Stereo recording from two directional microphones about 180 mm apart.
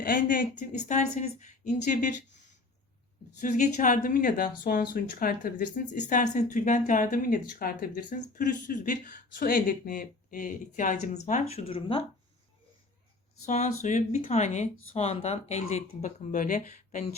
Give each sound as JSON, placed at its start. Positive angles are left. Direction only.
{"t": 0.0, "sound": "speech", "side_deg": 50}
{"t": 3.4, "sound": "speech", "side_deg": 45}
{"t": 13.4, "sound": "speech", "side_deg": 40}